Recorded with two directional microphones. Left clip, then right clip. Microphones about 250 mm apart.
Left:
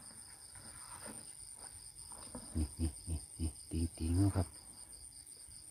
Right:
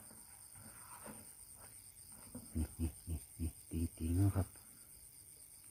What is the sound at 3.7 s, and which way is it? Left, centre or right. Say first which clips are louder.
Speech: left 2 dB; centre.